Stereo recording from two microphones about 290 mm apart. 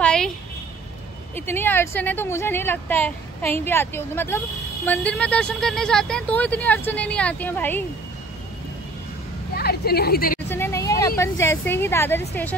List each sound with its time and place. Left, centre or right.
0.0 s a sound: centre
1.3 s a woman's voice: centre
9.6 s a woman's voice: left
10.5 s a woman's voice: centre